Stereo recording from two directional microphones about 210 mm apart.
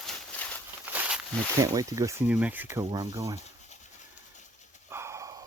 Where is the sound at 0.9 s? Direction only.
5° right (ahead or behind).